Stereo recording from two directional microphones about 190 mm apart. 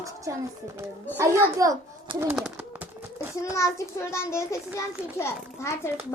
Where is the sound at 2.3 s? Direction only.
5° right (ahead or behind).